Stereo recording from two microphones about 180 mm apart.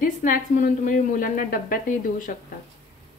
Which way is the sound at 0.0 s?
50° left (ahead or behind).